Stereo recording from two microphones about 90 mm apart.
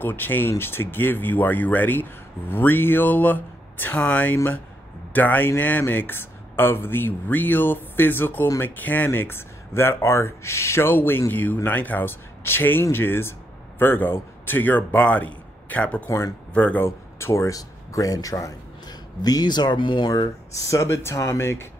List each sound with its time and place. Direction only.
0.0 s a man's voice: 20° left (ahead or behind)
16.1 s speech: 35° left (ahead or behind)
16.5 s speech: 15° left (ahead or behind)
16.8 s speech: 30° left (ahead or behind); by 20.1 s 60° left (ahead or behind)
20.1 s speech: 40° left (ahead or behind)